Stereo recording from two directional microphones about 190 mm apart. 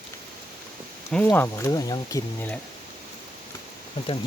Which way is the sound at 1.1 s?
10° left (ahead or behind).